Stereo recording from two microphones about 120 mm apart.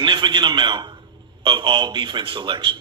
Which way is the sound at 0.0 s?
40° right (ahead or behind).